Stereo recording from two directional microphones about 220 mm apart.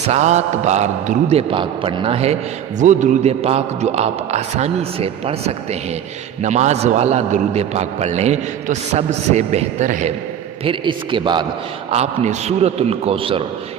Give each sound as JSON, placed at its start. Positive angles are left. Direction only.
{"t": 0.0, "sound": "a man's voice", "side_deg": -30}
{"t": 10.6, "sound": "a man's voice", "side_deg": -25}